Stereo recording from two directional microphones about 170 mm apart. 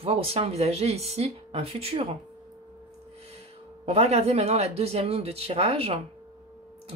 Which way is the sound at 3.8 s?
40° right (ahead or behind).